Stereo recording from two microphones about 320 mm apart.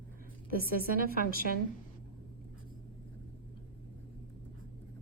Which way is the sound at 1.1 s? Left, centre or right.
Left.